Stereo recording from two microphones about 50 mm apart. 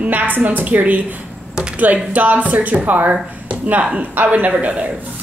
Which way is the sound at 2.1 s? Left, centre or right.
Right.